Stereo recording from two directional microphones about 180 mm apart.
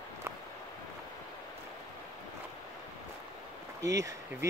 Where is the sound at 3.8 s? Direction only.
20° right (ahead or behind).